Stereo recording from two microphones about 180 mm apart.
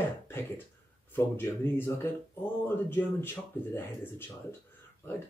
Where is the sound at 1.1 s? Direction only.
10° left (ahead or behind).